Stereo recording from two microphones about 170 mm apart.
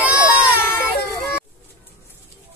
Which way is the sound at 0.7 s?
10° left (ahead or behind).